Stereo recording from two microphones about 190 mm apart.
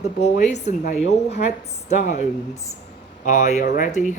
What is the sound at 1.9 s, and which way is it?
Speech, 40° left (ahead or behind).